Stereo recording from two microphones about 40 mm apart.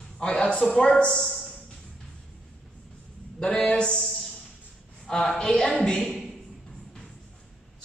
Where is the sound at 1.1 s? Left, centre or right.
Centre.